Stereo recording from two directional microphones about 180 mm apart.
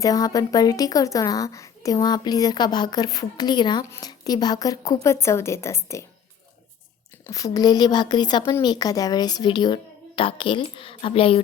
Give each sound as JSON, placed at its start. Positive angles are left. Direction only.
{"t": 0.0, "sound": "a woman's voice", "side_deg": 20}
{"t": 7.3, "sound": "a woman's voice", "side_deg": 20}